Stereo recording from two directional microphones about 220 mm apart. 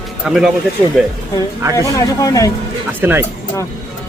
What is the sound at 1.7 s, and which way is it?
Speech, 15° left (ahead or behind).